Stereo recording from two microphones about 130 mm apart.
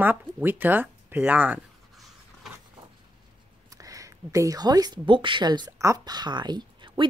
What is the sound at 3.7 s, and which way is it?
Speech, 25° right (ahead or behind).